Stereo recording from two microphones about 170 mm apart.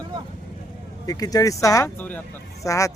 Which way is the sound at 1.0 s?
20° left (ahead or behind).